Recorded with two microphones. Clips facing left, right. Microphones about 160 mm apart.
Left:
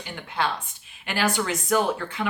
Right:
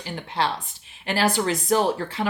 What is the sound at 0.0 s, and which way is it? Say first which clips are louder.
Speech: right 2 dB; 35° right (ahead or behind).